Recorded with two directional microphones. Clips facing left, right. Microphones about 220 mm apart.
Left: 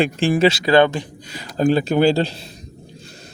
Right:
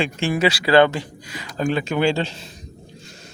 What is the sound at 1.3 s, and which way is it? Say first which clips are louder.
Speech: left 5 dB; 35° left (ahead or behind).